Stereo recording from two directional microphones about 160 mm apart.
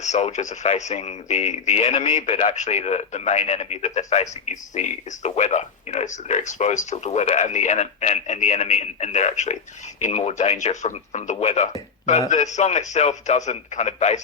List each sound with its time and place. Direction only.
0.0 s speech: 45° left (ahead or behind)